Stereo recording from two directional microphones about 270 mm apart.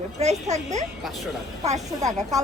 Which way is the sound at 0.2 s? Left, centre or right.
Right.